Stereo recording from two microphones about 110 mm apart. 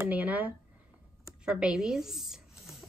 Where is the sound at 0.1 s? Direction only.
15° right (ahead or behind).